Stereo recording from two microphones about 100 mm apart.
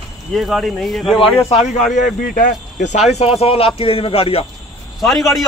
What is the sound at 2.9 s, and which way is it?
Speech, 90° left.